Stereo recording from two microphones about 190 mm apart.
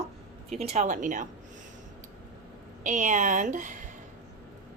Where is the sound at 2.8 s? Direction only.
40° right (ahead or behind).